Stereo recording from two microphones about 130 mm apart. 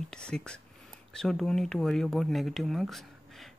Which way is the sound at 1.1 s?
5° left (ahead or behind).